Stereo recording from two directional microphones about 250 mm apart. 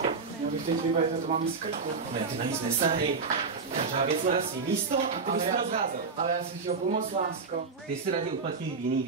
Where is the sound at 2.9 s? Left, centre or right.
Right.